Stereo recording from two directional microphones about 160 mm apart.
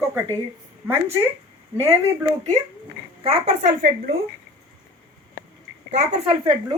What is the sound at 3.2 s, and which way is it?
Speech, 35° right (ahead or behind).